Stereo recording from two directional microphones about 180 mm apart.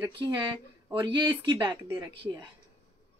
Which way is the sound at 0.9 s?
25° right (ahead or behind).